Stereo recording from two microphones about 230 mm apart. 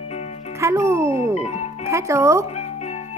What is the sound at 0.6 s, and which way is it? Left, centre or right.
A child's voice, centre.